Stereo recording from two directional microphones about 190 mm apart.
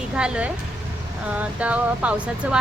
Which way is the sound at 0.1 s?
5° right (ahead or behind).